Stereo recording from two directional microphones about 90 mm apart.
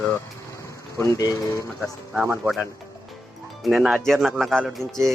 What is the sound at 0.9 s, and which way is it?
Speech, 40° left (ahead or behind).